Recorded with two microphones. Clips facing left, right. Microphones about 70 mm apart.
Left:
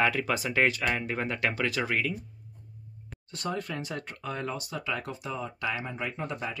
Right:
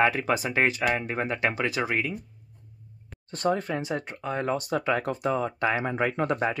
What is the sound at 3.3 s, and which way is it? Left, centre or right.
Speech, right.